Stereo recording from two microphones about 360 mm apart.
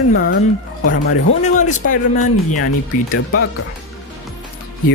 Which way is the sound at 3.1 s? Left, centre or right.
Left.